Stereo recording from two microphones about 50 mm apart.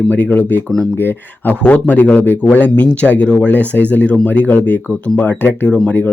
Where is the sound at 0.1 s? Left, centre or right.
Left.